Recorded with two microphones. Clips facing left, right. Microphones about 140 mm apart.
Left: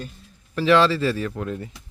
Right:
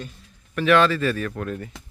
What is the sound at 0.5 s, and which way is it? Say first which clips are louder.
Speech: left 1 dB; 30° left (ahead or behind).